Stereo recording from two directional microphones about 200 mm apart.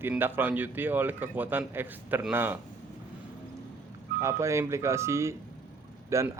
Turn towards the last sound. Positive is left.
turn(degrees=-15)  # may be behind; listen again after turning